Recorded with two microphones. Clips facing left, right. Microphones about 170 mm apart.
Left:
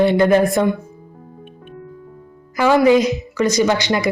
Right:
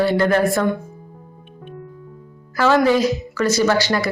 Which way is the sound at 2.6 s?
15° left (ahead or behind).